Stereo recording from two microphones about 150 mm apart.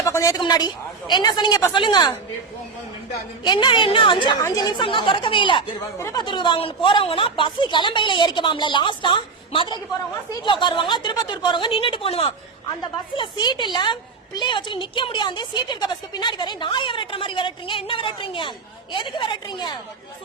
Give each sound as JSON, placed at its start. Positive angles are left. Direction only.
{"t": 0.0, "sound": "a woman's voice", "side_deg": 20}
{"t": 3.4, "sound": "a woman's voice", "side_deg": 30}
{"t": 6.0, "sound": "a woman's voice", "side_deg": 20}
{"t": 6.2, "sound": "a woman's voice", "side_deg": 30}